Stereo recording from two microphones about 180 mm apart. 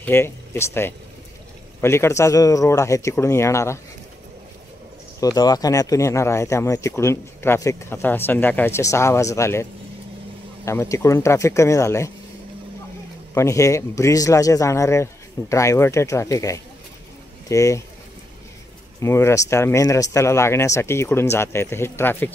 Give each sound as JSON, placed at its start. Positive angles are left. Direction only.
{"t": 0.0, "sound": "speech", "side_deg": 15}
{"t": 5.2, "sound": "speech", "side_deg": 20}
{"t": 13.3, "sound": "speech", "side_deg": 15}
{"t": 18.9, "sound": "speech", "side_deg": 15}